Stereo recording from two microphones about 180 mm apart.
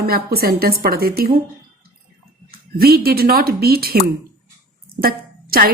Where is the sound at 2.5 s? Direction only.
55° right (ahead or behind).